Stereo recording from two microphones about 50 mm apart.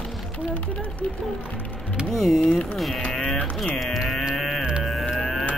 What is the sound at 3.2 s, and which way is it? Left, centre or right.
Speech, centre.